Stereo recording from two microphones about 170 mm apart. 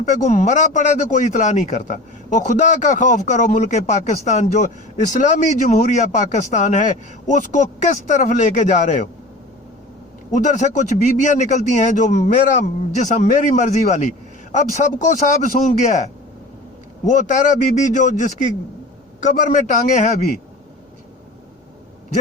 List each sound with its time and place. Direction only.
0.1 s speech: 45° left (ahead or behind)
10.3 s speech: 45° left (ahead or behind)
17.1 s speech: 45° left (ahead or behind)